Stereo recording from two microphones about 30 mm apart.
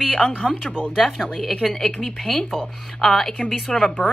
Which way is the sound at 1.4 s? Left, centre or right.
Centre.